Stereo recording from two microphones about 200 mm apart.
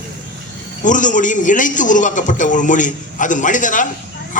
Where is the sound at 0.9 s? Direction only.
40° left (ahead or behind).